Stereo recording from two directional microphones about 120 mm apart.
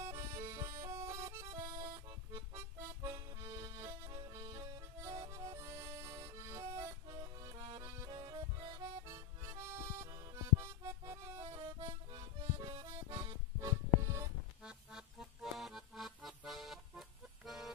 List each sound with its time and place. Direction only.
0.0 s music: 25° right (ahead or behind)
3.1 s accordion: 30° right (ahead or behind)
5.5 s music: 25° right (ahead or behind)
8.2 s music: 45° right (ahead or behind)
12.5 s accordion: 55° right (ahead or behind)
13.1 s music: 25° right (ahead or behind)
14.6 s music: 5° right (ahead or behind)